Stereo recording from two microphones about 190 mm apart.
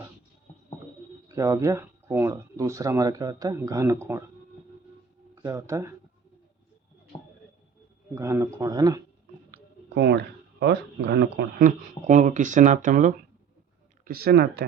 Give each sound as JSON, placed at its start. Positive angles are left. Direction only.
{"t": 1.3, "sound": "speech", "side_deg": -15}
{"t": 5.3, "sound": "speech", "side_deg": -15}
{"t": 8.1, "sound": "speech", "side_deg": -15}
{"t": 9.5, "sound": "a sound", "side_deg": -60}
{"t": 11.6, "sound": "speech", "side_deg": -40}